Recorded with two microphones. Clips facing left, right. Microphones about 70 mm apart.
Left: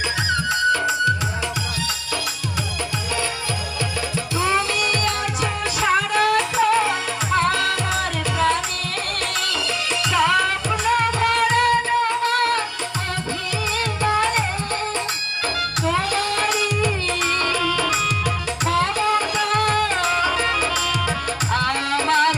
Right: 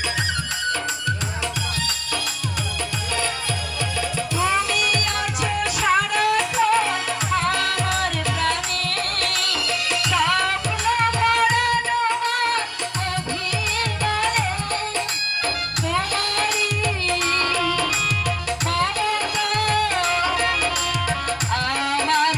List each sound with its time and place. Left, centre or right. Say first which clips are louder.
4.4 s music: left 1 dB; centre
10.1 s music: left 2 dB; centre
14.0 s music: left 3 dB; centre
15.9 s music: left 2 dB; centre
18.6 s music: left 3 dB; centre